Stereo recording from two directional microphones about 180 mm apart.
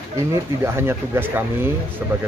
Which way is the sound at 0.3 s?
15° right (ahead or behind).